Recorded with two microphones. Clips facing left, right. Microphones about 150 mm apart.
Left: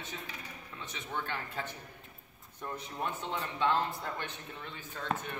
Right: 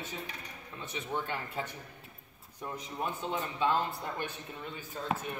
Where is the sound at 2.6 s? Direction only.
10° right (ahead or behind).